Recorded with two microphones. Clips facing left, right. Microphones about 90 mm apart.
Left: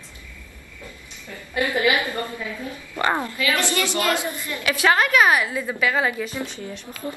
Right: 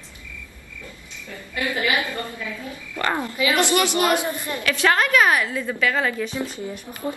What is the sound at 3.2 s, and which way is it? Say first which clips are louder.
A woman's voice: right 3 dB; 20° right (ahead or behind).